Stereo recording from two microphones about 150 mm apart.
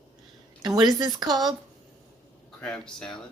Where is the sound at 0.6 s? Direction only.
30° right (ahead or behind).